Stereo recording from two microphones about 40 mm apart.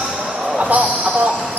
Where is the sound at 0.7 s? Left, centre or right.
Right.